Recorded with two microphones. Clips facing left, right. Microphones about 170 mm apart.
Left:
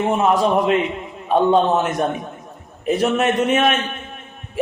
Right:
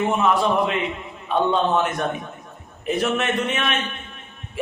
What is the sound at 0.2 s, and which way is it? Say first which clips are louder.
A man's voice: left 3 dB; 40° left (ahead or behind).